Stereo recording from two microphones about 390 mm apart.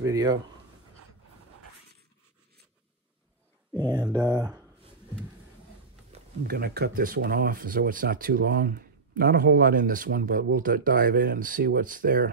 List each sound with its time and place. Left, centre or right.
0.0 s a sound: centre
3.7 s speech: centre
6.1 s speech: right